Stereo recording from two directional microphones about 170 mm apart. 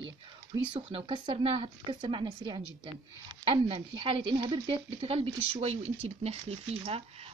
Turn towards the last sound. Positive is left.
turn(degrees=-35)  # may be behind; listen again after turning